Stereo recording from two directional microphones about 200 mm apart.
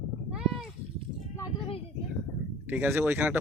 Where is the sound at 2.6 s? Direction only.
10° right (ahead or behind).